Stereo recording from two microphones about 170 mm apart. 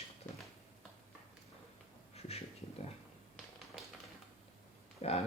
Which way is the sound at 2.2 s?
35° left (ahead or behind).